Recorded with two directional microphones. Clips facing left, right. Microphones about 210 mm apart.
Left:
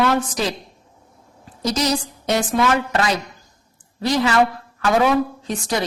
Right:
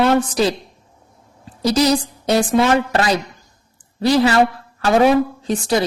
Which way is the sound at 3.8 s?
30° right (ahead or behind).